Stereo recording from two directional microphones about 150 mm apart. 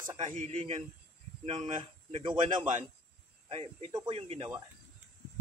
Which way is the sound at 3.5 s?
40° right (ahead or behind).